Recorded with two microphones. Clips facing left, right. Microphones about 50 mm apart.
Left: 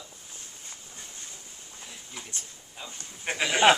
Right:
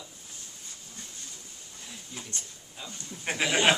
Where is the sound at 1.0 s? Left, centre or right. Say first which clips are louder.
Right 1 dB; left.